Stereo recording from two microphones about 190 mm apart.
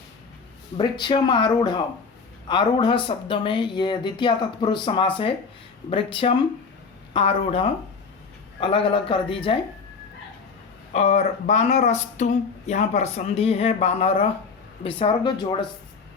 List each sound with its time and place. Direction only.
0.8 s speech: 25° left (ahead or behind)
10.9 s speech: 35° left (ahead or behind)